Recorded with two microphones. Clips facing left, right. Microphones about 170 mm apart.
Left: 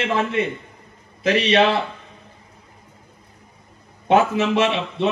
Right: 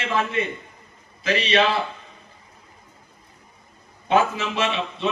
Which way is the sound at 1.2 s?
60° left (ahead or behind).